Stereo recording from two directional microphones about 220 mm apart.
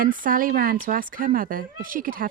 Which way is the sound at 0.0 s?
40° right (ahead or behind).